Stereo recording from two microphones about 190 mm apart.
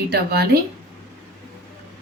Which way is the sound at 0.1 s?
55° right (ahead or behind).